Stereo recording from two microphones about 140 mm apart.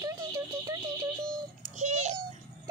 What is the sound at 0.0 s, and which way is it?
Music, 25° right (ahead or behind).